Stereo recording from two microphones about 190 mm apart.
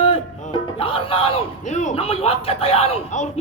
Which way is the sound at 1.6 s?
40° left (ahead or behind).